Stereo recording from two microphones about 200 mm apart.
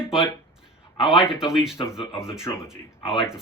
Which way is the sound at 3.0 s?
25° left (ahead or behind).